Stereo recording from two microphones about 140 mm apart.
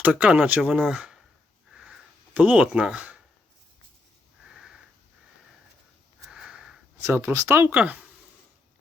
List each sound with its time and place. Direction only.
0.0 s speech: 10° right (ahead or behind)
1.7 s a sound: 5° right (ahead or behind)
4.4 s sniff: 5° right (ahead or behind)
6.2 s sniff: 5° right (ahead or behind)
7.0 s speech: 15° right (ahead or behind)